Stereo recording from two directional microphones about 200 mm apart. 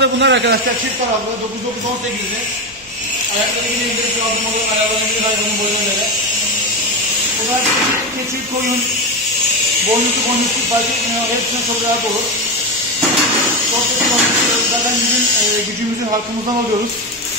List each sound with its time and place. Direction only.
0.0 s a man's voice: 60° right (ahead or behind)